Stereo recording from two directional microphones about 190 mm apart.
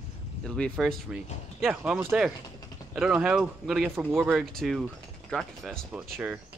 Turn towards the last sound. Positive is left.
turn(degrees=0)  # may be behind; listen again after turning